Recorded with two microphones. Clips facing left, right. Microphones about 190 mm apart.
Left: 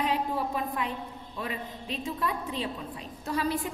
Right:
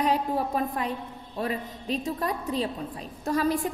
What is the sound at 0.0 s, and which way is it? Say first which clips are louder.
A woman's voice: right 3 dB; 40° right (ahead or behind).